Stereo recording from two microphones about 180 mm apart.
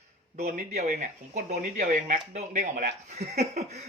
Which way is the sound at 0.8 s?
40° right (ahead or behind).